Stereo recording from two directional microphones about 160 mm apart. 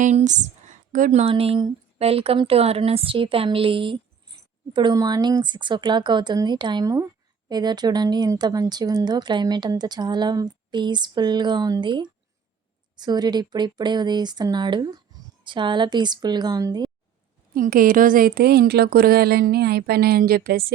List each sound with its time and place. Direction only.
0.0 s speech: 45° right (ahead or behind)
1.2 s a woman's voice: 35° right (ahead or behind)
17.5 s speech: 65° right (ahead or behind)